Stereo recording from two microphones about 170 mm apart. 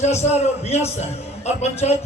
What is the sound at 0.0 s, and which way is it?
A man's voice, 40° left (ahead or behind).